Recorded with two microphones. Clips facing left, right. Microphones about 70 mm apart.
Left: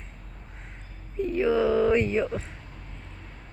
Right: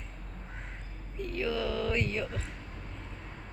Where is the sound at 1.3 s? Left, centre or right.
Left.